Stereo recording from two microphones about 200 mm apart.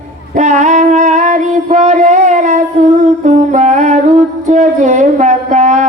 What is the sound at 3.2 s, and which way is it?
Music, 35° right (ahead or behind).